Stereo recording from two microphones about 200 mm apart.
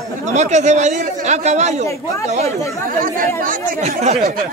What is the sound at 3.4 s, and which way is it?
Speech, 45° right (ahead or behind).